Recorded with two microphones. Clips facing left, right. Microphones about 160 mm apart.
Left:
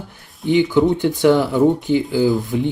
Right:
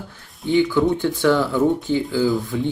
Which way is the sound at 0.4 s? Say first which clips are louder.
Left 3 dB; 20° left (ahead or behind).